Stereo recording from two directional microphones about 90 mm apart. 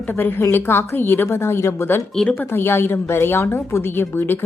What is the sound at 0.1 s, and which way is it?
A woman's voice, 25° left (ahead or behind).